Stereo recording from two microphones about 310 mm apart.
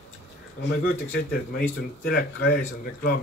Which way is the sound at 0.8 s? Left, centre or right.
Left.